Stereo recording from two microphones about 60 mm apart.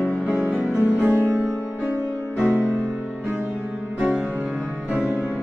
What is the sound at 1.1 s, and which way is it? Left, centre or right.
Music, left.